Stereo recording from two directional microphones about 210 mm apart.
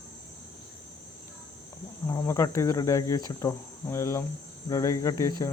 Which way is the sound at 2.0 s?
15° left (ahead or behind).